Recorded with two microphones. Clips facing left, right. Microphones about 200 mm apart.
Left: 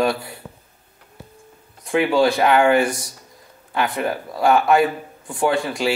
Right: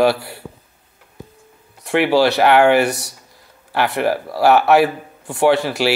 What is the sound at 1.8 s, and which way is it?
Speech, 75° right (ahead or behind).